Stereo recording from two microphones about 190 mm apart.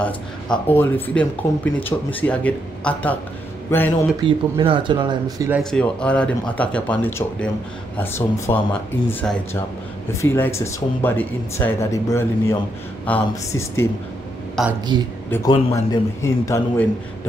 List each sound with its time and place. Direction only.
0.0 s speech: 10° left (ahead or behind)
4.2 s speech: 25° right (ahead or behind)
5.6 s speech: 5° left (ahead or behind)
14.6 s speech: centre (ahead or behind)
15.3 s speech: 20° left (ahead or behind)